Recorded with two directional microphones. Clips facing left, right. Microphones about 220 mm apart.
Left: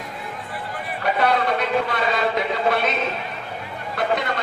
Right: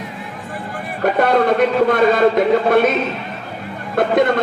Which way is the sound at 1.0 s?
50° right (ahead or behind).